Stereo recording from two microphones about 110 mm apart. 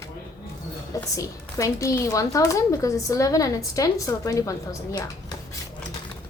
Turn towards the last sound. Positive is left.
turn(degrees=30)  # may be behind; listen again after turning